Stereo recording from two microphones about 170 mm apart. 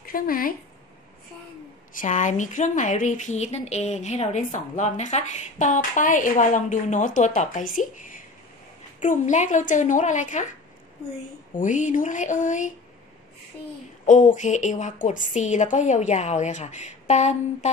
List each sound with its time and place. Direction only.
0.0 s speech: 60° left (ahead or behind)
2.0 s speech: 45° left (ahead or behind)
11.5 s speech: 50° left (ahead or behind)
14.0 s speech: 45° left (ahead or behind)